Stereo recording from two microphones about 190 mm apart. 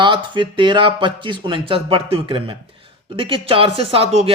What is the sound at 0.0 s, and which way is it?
Speech, 25° right (ahead or behind).